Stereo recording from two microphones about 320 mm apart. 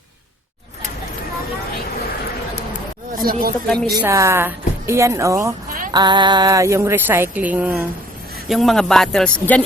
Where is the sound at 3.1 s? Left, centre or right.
Right.